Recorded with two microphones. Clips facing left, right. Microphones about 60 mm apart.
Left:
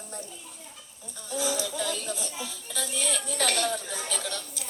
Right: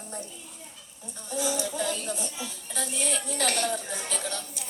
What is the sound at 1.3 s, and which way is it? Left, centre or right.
Speech, right.